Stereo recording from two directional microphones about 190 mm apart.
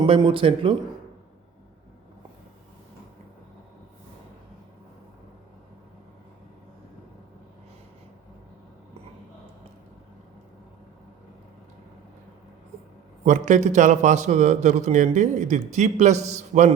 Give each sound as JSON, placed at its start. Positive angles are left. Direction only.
{"t": 0.0, "sound": "speech", "side_deg": -25}
{"t": 13.2, "sound": "a man's voice", "side_deg": -40}